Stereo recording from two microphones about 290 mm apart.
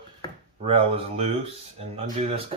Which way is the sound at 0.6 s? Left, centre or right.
Right.